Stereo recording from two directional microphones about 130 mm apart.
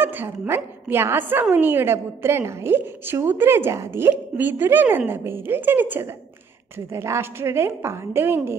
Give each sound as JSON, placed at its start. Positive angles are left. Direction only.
{"t": 0.0, "sound": "a woman's voice", "side_deg": -15}